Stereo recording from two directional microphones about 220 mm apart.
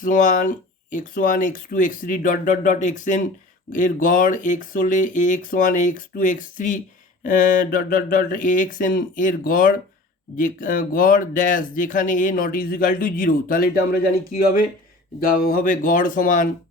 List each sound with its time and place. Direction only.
0.0 s speech: 35° left (ahead or behind)